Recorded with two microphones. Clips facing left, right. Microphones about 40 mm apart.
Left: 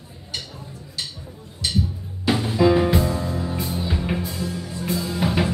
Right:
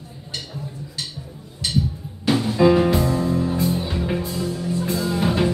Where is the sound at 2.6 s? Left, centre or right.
Centre.